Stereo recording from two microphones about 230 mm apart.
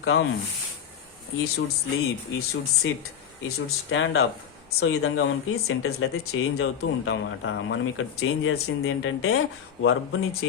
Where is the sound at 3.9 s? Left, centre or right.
Left.